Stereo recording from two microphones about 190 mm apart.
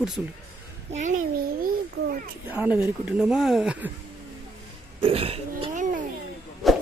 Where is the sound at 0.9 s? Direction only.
40° right (ahead or behind).